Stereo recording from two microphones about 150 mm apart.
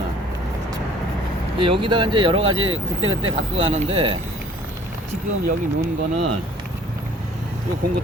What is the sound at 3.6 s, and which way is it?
Speech, 45° right (ahead or behind).